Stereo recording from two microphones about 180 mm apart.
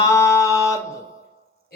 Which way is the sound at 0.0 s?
15° left (ahead or behind).